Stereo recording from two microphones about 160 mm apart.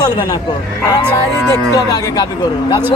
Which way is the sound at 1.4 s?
25° left (ahead or behind).